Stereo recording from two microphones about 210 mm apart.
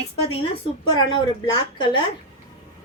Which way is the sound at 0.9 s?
20° left (ahead or behind).